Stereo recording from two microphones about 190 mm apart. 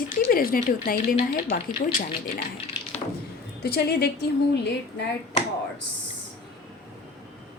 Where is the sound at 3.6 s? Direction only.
55° left (ahead or behind).